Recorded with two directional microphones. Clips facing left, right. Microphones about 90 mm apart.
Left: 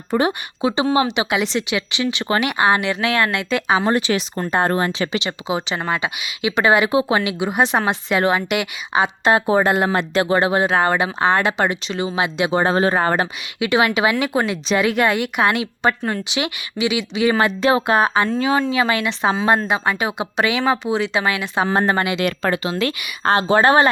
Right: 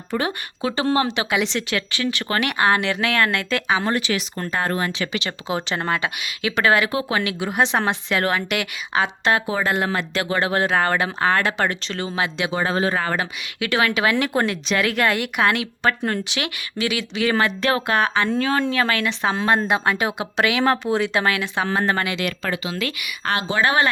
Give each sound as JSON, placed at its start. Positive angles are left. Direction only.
{"t": 0.1, "sound": "speech", "side_deg": 20}
{"t": 3.8, "sound": "speech", "side_deg": 25}
{"t": 5.5, "sound": "a woman's voice", "side_deg": 5}
{"t": 8.2, "sound": "speech", "side_deg": 20}
{"t": 9.3, "sound": "speech", "side_deg": 35}
{"t": 10.7, "sound": "speech", "side_deg": 10}
{"t": 12.5, "sound": "speech", "side_deg": 40}
{"t": 13.6, "sound": "speech", "side_deg": 15}
{"t": 17.6, "sound": "speech", "side_deg": 20}
{"t": 18.3, "sound": "a woman's voice", "side_deg": 15}
{"t": 22.2, "sound": "speech", "side_deg": 40}
{"t": 22.7, "sound": "speech", "side_deg": 30}